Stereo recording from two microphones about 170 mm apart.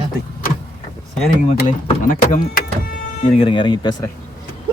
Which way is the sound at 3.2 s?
30° left (ahead or behind).